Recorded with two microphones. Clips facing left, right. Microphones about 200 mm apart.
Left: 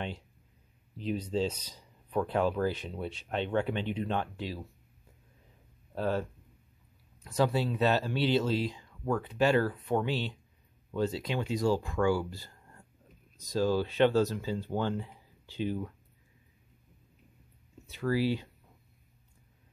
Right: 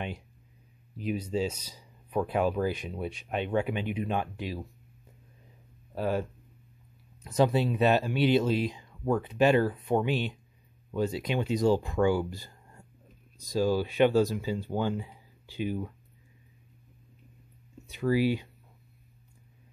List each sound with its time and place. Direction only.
0.9 s speech: 10° right (ahead or behind)
5.9 s speech: 10° right (ahead or behind)
7.2 s speech: 20° right (ahead or behind)
17.8 s speech: 15° right (ahead or behind)